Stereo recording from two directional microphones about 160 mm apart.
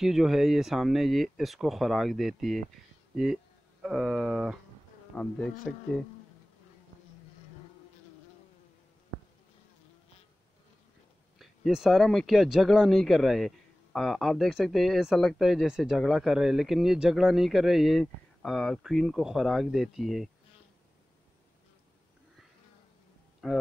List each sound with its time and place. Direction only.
0.0 s speech: centre (ahead or behind)
3.8 s speech: centre (ahead or behind)
5.1 s speech: 5° left (ahead or behind)
11.3 s speech: centre (ahead or behind)
23.4 s speech: centre (ahead or behind)